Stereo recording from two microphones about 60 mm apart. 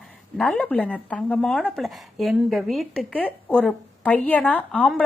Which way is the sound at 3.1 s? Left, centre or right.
Centre.